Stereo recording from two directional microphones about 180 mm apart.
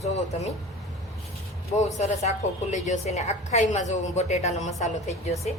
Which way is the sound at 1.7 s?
40° left (ahead or behind).